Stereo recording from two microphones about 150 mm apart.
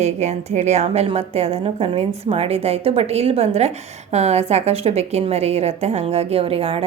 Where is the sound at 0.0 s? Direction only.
50° right (ahead or behind).